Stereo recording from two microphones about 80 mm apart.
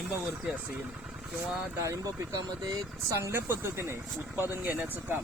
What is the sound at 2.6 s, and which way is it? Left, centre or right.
Speech, right.